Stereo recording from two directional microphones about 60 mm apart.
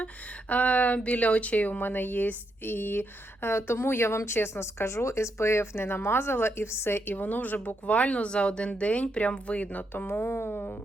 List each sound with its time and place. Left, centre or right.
0.0 s speech: left
9.9 s speech: left